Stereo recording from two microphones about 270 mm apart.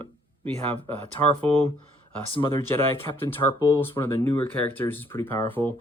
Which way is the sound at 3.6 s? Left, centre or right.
Centre.